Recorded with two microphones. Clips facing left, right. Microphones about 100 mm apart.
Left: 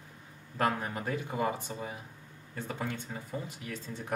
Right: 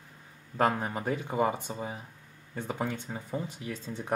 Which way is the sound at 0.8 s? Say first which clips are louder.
Right 3 dB; 20° right (ahead or behind).